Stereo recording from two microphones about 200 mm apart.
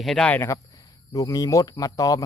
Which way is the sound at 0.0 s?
Centre (ahead or behind).